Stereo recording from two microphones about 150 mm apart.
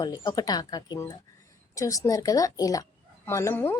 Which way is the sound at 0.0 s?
25° left (ahead or behind).